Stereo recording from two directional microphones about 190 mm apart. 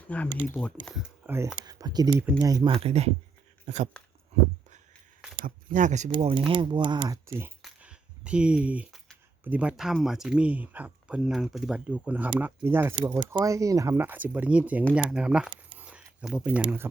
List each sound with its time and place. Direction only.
0.1 s speech: 5° left (ahead or behind)
0.9 s speech: centre (ahead or behind)
1.6 s speech: 20° right (ahead or behind)
2.8 s speech: 35° right (ahead or behind)
3.9 s speech: 5° left (ahead or behind)
5.7 s speech: 40° right (ahead or behind)
6.1 s speech: 30° right (ahead or behind)
7.6 s a sound: 5° right (ahead or behind)
9.4 s speech: 10° right (ahead or behind)